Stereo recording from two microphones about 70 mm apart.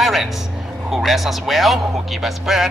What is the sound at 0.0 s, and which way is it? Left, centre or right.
Music, centre.